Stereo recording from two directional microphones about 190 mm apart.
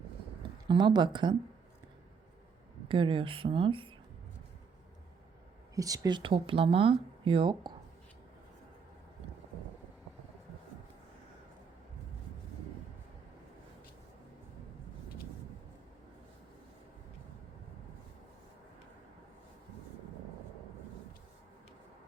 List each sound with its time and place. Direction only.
0.7 s speech: 25° right (ahead or behind)
2.9 s speech: 25° right (ahead or behind)
5.7 s speech: 20° right (ahead or behind)